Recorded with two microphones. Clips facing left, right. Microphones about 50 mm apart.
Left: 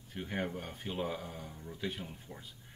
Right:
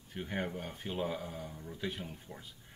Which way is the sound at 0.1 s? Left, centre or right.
Centre.